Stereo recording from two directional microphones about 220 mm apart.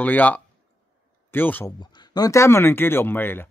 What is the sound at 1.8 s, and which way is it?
Speech, 20° left (ahead or behind).